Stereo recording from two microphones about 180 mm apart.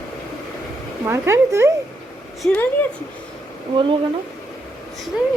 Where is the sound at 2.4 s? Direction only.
10° left (ahead or behind).